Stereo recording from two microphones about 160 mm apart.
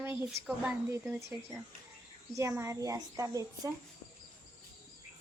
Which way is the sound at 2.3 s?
15° right (ahead or behind).